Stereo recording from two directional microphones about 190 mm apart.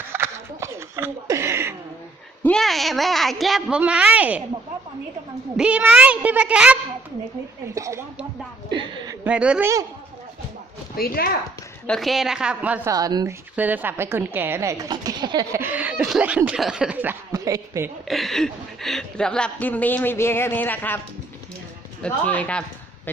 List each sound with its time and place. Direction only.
0.1 s a sound: 15° right (ahead or behind)
2.4 s a woman's voice: 5° left (ahead or behind)
5.5 s a woman's voice: 5° right (ahead or behind)
7.8 s a woman's voice: 15° right (ahead or behind)
9.2 s a woman's voice: 5° right (ahead or behind)
10.9 s speech: 50° left (ahead or behind)
11.9 s a woman's voice: centre (ahead or behind)
12.9 s speech: 20° right (ahead or behind)
13.6 s a woman's voice: 10° right (ahead or behind)
18.1 s a woman's voice: centre (ahead or behind)
22.0 s a woman's voice: 5° left (ahead or behind)